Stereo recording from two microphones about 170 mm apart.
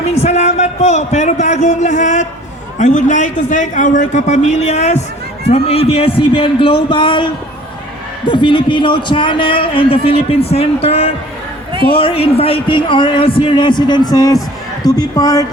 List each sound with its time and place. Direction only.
0.0 s a sound: 40° left (ahead or behind)
2.7 s a man's voice: 45° left (ahead or behind); by 7.3 s 30° left (ahead or behind)
8.3 s speech: 30° left (ahead or behind)